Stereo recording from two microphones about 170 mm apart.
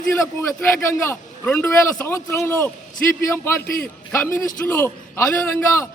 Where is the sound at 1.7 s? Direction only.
15° left (ahead or behind).